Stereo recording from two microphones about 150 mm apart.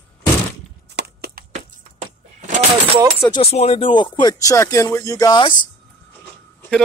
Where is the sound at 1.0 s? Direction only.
90° right.